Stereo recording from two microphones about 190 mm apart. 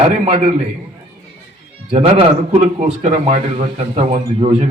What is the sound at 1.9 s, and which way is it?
A man's voice, 30° right (ahead or behind).